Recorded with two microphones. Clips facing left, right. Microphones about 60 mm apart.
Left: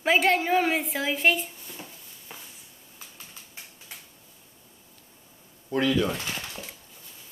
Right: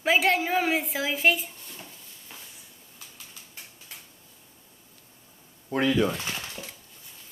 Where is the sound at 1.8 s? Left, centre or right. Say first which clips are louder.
Left 2 dB; centre.